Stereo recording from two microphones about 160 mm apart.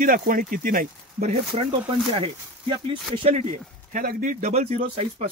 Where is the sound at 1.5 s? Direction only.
35° right (ahead or behind).